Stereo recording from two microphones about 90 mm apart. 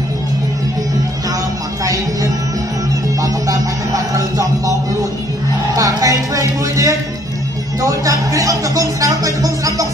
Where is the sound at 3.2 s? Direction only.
40° right (ahead or behind).